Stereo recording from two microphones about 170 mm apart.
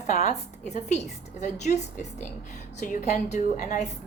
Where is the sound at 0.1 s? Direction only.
40° left (ahead or behind).